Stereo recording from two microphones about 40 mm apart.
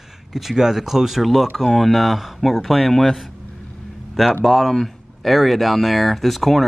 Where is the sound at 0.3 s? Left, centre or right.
Centre.